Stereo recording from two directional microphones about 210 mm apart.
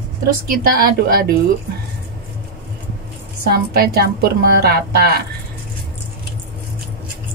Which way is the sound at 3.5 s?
50° right (ahead or behind).